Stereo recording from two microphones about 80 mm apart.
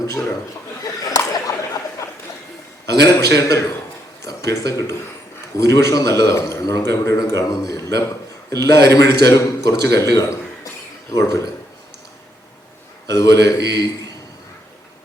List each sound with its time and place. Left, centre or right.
1.0 s a sound: left
3.1 s a man's voice: left
13.1 s a man's voice: left